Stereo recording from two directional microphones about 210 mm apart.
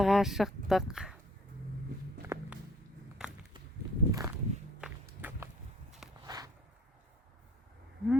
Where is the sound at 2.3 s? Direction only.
10° right (ahead or behind).